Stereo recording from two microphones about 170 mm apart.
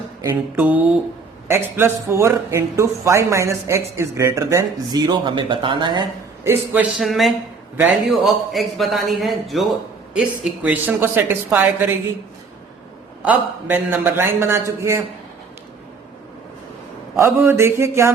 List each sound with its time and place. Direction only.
0.2 s a man's voice: 15° right (ahead or behind)
7.0 s a man's voice: centre (ahead or behind)
13.2 s a man's voice: 10° right (ahead or behind)
17.2 s a man's voice: 15° right (ahead or behind)